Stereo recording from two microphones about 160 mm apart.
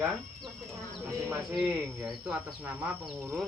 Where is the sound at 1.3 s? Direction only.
10° right (ahead or behind).